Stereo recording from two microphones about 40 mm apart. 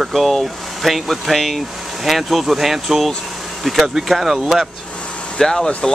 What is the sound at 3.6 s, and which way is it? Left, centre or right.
Speech, centre.